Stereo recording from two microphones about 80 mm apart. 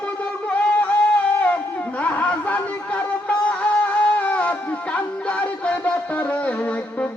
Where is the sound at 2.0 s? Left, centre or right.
Centre.